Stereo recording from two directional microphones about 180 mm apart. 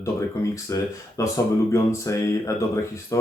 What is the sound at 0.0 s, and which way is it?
Speech, 15° left (ahead or behind).